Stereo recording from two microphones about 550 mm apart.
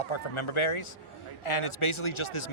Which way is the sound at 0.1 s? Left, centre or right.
Left.